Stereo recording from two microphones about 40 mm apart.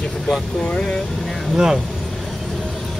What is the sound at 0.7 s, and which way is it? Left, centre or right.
Speech, left.